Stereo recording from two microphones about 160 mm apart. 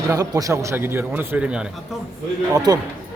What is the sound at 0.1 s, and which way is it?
A man's voice, 20° right (ahead or behind).